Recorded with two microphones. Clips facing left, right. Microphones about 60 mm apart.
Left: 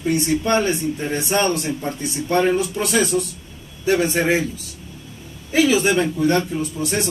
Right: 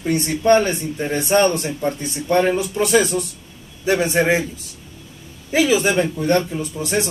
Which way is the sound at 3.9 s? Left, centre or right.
Centre.